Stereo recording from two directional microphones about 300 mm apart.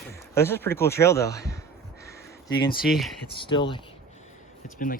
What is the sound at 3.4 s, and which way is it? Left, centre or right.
Speech, centre.